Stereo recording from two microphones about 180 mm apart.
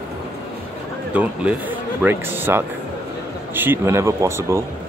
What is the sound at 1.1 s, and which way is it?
Speech, 5° right (ahead or behind).